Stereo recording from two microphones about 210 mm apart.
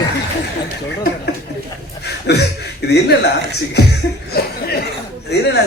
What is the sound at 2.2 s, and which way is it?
Speech, 50° left (ahead or behind).